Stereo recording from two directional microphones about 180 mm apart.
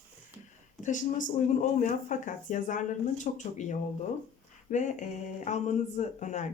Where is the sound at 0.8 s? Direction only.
45° left (ahead or behind).